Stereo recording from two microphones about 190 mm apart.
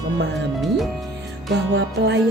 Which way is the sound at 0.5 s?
Centre (ahead or behind).